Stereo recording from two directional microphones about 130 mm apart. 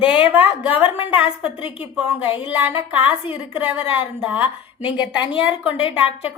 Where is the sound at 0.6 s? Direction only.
10° right (ahead or behind).